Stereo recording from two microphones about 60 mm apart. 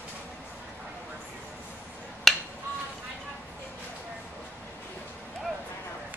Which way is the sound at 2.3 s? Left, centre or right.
Centre.